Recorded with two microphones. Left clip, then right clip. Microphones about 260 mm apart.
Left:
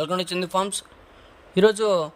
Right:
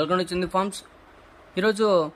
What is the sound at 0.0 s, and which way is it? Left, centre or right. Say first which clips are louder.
A man's voice: right 1 dB; left.